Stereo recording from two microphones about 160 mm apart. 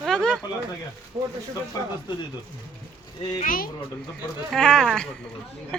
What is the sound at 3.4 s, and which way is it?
Speech, 60° left (ahead or behind).